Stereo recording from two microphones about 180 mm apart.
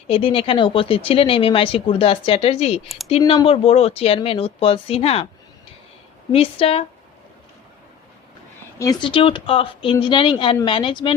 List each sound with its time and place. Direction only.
0.1 s speech: 30° left (ahead or behind)
6.3 s speech: 35° left (ahead or behind)
8.8 s speech: 25° left (ahead or behind)